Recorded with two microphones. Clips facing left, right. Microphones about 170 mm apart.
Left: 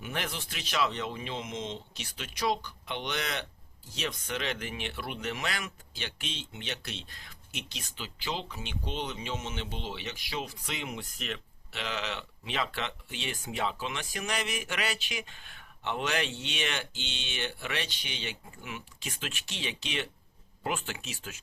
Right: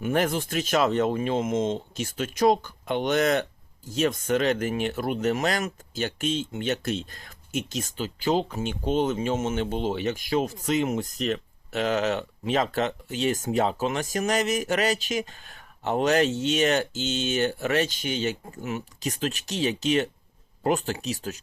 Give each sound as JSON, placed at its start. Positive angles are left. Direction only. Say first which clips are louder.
{"t": 0.0, "sound": "speech", "louder": "right 12 dB", "side_deg": -45}